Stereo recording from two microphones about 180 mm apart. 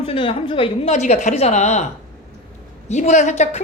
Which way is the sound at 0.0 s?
30° left (ahead or behind).